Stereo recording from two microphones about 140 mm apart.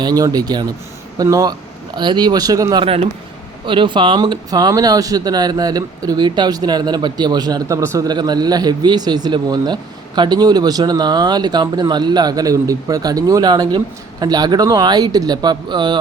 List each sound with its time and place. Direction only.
0.0 s speech: 30° right (ahead or behind)